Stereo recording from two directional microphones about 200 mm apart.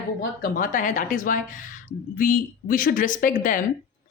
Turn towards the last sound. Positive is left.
turn(degrees=40)  # may be behind; listen again after turning